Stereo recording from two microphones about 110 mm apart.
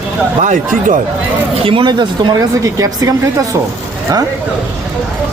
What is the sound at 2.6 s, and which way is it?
Speech, 30° right (ahead or behind).